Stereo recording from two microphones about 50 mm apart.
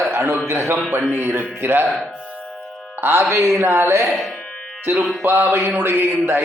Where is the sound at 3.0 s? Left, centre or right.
Right.